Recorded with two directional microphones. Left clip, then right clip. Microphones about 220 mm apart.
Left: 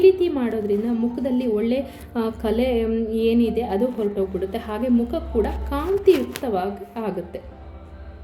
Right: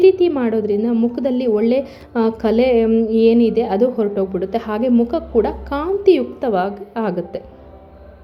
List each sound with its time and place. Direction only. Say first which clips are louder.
0.0 s a woman's voice: right 4 dB; 5° right (ahead or behind)